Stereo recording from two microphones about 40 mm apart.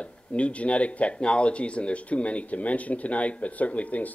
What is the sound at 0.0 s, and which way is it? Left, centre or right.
Speech, left.